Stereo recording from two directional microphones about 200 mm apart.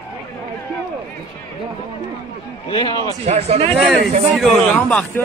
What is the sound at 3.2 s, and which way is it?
Speech, 30° right (ahead or behind).